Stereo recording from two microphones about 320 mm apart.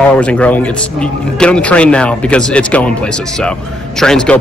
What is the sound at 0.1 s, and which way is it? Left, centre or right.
Speech, centre.